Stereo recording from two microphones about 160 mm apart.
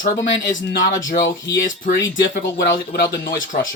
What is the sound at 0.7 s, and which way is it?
Speech, 80° left.